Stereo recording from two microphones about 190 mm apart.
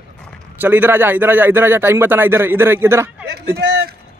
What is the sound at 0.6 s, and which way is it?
A man's voice, 10° right (ahead or behind).